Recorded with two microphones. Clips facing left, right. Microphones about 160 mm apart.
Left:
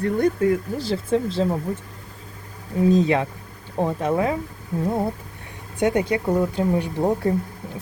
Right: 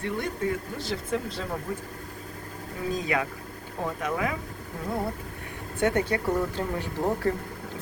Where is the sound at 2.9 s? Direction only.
25° left (ahead or behind).